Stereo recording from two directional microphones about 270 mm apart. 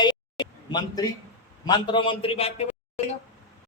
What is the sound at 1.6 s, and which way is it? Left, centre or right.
A man's voice, centre.